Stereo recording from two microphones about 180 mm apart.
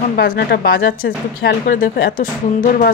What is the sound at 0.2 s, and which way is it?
Speech, 60° left (ahead or behind).